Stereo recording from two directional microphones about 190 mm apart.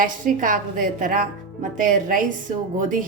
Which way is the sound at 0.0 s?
45° right (ahead or behind).